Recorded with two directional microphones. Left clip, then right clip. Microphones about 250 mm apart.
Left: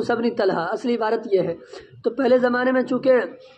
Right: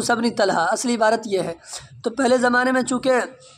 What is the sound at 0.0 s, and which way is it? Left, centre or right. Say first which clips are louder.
Speech: right 1 dB; right.